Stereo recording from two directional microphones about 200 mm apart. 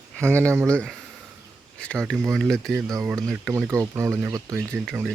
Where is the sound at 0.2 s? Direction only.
5° left (ahead or behind).